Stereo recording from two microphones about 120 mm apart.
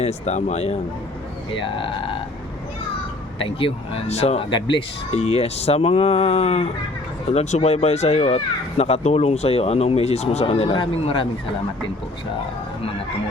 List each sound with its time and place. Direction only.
0.0 s speech: 65° left (ahead or behind)
1.6 s speech: 45° left (ahead or behind)
3.6 s speech: 55° left (ahead or behind)
5.1 s speech: 60° left (ahead or behind)